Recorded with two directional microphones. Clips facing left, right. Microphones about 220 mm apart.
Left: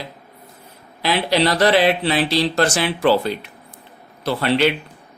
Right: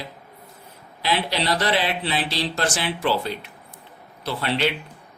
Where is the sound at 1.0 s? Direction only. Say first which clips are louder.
Left 6 dB; 90° left.